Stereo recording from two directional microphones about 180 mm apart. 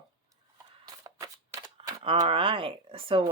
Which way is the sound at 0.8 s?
20° right (ahead or behind).